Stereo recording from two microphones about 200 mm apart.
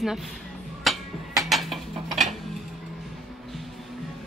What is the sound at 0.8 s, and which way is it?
Music, centre (ahead or behind).